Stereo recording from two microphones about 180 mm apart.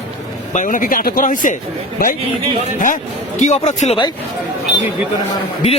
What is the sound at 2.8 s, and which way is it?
Speech, 45° left (ahead or behind).